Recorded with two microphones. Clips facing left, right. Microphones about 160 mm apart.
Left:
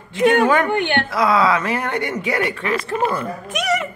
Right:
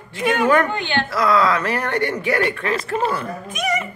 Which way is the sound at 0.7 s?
60° left (ahead or behind).